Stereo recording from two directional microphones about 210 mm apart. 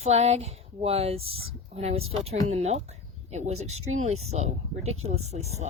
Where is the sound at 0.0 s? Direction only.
30° right (ahead or behind).